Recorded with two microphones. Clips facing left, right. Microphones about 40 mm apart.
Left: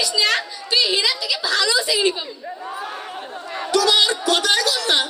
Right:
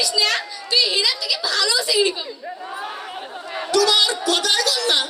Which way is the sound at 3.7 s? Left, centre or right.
Left.